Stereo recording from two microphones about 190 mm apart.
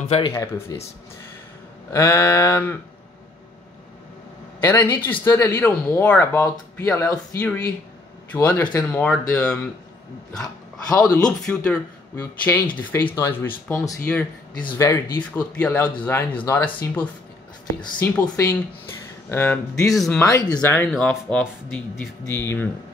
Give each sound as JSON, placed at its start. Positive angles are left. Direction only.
{"t": 0.3, "sound": "speech", "side_deg": 15}
{"t": 1.9, "sound": "speech", "side_deg": 15}
{"t": 4.6, "sound": "speech", "side_deg": 10}
{"t": 10.9, "sound": "speech", "side_deg": 5}
{"t": 20.9, "sound": "speech", "side_deg": 0}